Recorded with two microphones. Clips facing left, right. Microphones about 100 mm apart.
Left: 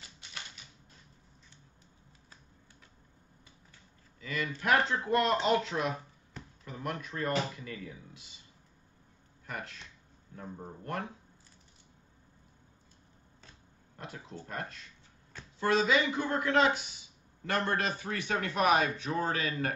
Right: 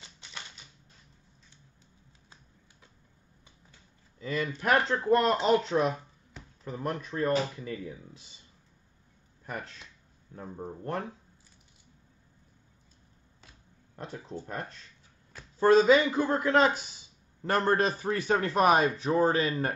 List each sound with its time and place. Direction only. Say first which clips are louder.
4.2 s a man's voice: right 4 dB; 35° right (ahead or behind)
9.5 s a man's voice: right 2 dB; 35° right (ahead or behind)
10.8 s a man's voice: right 3 dB; 30° right (ahead or behind)
13.9 s a man's voice: right 5 dB; 30° right (ahead or behind)